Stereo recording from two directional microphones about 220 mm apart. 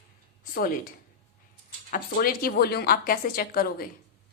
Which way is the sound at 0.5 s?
40° left (ahead or behind).